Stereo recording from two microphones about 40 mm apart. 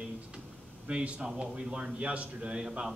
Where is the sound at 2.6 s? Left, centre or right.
Centre.